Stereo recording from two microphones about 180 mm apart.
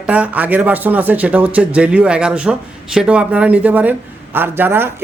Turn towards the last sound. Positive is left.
turn(degrees=-10)  # may be behind; listen again after turning